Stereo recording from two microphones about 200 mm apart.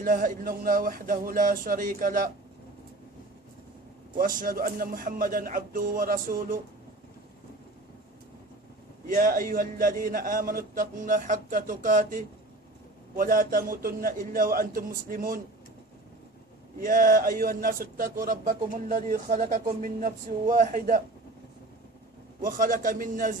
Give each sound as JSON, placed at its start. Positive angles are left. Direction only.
{"t": 0.0, "sound": "a man's voice", "side_deg": -45}
{"t": 4.1, "sound": "a man's voice", "side_deg": -45}
{"t": 9.0, "sound": "a man's voice", "side_deg": -45}
{"t": 16.8, "sound": "a man's voice", "side_deg": -45}
{"t": 22.4, "sound": "a man's voice", "side_deg": -45}